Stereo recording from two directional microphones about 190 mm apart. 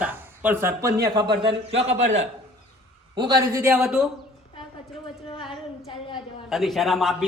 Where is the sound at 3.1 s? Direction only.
20° right (ahead or behind).